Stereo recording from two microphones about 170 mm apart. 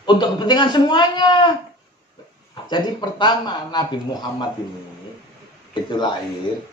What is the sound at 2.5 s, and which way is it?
Speech, 25° left (ahead or behind).